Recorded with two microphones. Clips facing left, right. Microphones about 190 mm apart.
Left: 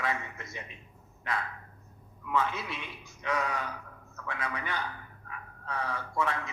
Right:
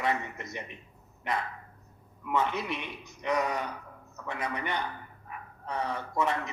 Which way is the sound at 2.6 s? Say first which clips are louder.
Right 5 dB; 20° right (ahead or behind).